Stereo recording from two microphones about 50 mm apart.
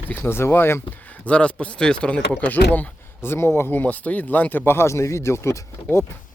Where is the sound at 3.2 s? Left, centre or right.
Left.